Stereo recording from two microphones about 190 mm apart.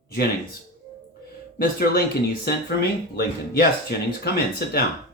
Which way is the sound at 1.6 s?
55° left (ahead or behind).